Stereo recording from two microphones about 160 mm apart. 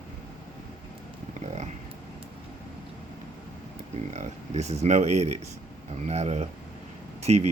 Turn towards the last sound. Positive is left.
turn(degrees=-45)  # may be behind; listen again after turning